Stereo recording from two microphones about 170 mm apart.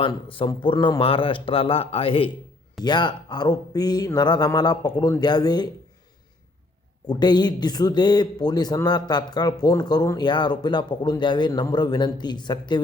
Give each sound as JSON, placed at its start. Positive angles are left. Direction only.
{"t": 0.0, "sound": "a man's voice", "side_deg": 30}
{"t": 7.1, "sound": "speech", "side_deg": 25}